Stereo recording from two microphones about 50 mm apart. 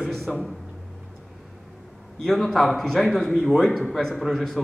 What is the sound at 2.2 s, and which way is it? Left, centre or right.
A man's voice, centre.